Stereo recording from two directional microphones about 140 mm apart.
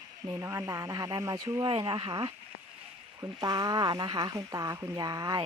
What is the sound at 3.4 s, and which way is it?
Speech, 30° right (ahead or behind).